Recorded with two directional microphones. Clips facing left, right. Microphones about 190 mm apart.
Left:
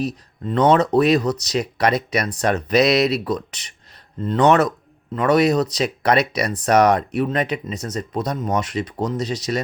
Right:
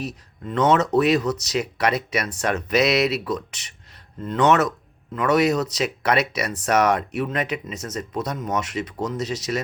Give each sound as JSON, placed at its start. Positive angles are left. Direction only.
{"t": 0.0, "sound": "speech", "side_deg": 35}